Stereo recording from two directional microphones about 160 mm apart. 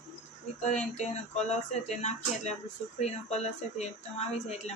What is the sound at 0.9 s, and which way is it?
Speech, 45° left (ahead or behind).